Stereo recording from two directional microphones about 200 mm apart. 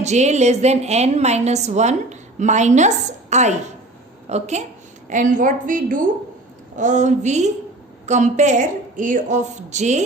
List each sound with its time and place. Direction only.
0.0 s a woman's voice: 35° right (ahead or behind)